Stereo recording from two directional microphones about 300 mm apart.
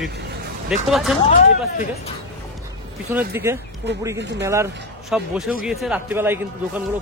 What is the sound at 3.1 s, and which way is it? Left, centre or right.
Speech, centre.